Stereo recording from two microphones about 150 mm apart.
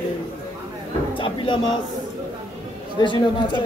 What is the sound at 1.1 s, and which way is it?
Speech, 35° left (ahead or behind).